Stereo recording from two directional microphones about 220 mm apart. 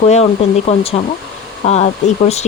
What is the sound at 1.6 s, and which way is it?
Speech, 30° left (ahead or behind).